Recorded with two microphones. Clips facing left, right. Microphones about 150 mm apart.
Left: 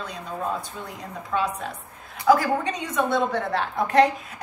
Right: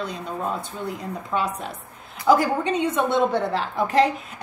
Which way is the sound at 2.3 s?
30° right (ahead or behind).